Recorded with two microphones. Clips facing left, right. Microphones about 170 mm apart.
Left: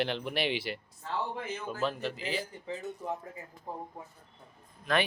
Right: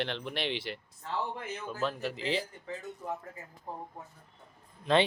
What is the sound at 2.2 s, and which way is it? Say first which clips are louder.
Speech: right 3 dB; 25° right (ahead or behind).